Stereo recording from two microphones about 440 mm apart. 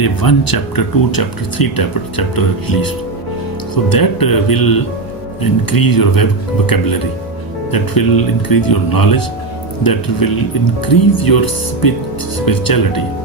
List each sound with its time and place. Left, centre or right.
0.0 s speech: left
7.7 s speech: left